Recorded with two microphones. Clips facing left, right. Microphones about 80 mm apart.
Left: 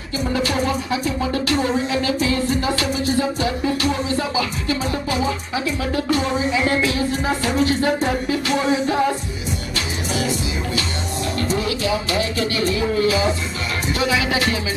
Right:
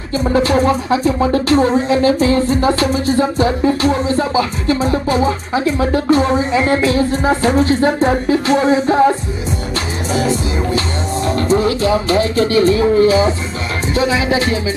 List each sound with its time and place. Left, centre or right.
0.2 s music: right
10.1 s music: right
11.2 s speech: right